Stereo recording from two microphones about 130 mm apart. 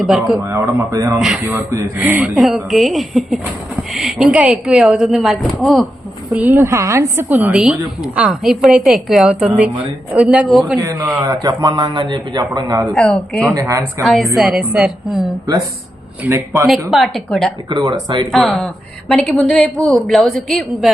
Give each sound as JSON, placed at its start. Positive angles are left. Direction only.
{"t": 0.0, "sound": "a woman's voice", "side_deg": -5}
{"t": 0.4, "sound": "a woman's voice", "side_deg": -20}
{"t": 6.3, "sound": "a woman's voice", "side_deg": -15}
{"t": 10.8, "sound": "a man's voice", "side_deg": -20}
{"t": 12.9, "sound": "a woman's voice", "side_deg": 5}
{"t": 13.5, "sound": "speech", "side_deg": -25}
{"t": 14.0, "sound": "a woman's voice", "side_deg": 0}
{"t": 16.2, "sound": "speech", "side_deg": -20}
{"t": 16.9, "sound": "a woman's voice", "side_deg": 0}
{"t": 17.7, "sound": "a man's voice", "side_deg": -35}
{"t": 18.3, "sound": "a woman's voice", "side_deg": 0}